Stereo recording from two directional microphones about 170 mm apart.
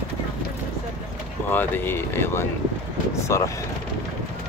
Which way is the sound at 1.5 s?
10° left (ahead or behind).